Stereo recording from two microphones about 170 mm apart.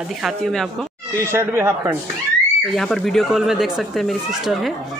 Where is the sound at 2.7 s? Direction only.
Centre (ahead or behind).